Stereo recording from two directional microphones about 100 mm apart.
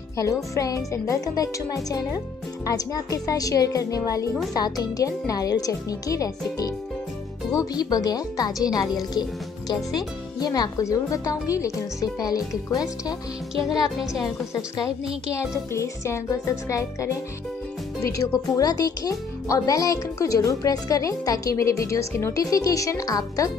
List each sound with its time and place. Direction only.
0.2 s speech: 35° left (ahead or behind)
9.9 s speech: 40° left (ahead or behind)
13.6 s speech: centre (ahead or behind)
15.7 s speech: 30° left (ahead or behind)